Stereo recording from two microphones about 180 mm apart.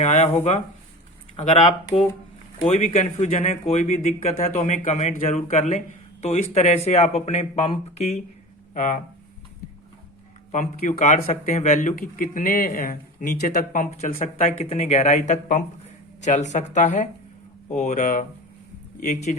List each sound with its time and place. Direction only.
0.0 s speech: 40° left (ahead or behind)
10.5 s speech: 45° left (ahead or behind)